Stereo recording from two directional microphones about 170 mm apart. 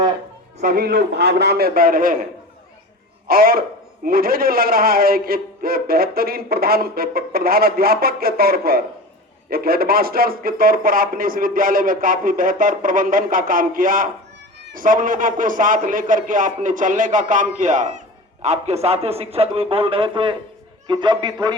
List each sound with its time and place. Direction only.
0.6 s a man's voice: 55° right (ahead or behind)
3.2 s a man's voice: 60° right (ahead or behind); by 21.5 s 25° right (ahead or behind)